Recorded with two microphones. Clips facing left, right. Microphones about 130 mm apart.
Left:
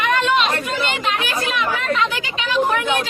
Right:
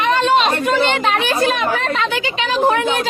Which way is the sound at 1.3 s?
35° right (ahead or behind).